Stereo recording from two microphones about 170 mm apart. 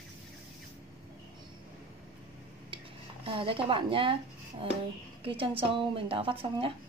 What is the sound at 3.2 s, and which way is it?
Speech, 30° right (ahead or behind).